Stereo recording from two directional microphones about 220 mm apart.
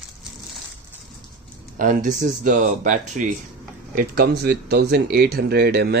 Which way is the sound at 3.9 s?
45° right (ahead or behind).